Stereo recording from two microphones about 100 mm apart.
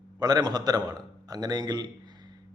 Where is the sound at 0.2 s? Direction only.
40° right (ahead or behind).